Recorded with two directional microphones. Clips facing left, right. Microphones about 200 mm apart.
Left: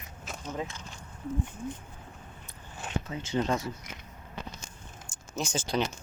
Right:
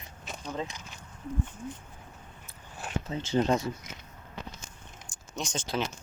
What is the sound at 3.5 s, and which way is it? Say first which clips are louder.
Speech: right 3 dB; 15° right (ahead or behind).